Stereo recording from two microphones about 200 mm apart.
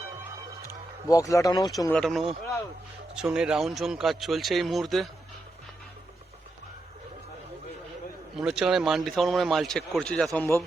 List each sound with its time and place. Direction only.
0.6 s a sound: 15° left (ahead or behind)
1.9 s speech: centre (ahead or behind)
8.4 s speech: 5° right (ahead or behind)